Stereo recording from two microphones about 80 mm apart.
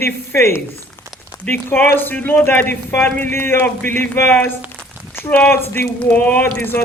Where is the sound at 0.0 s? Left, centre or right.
Left.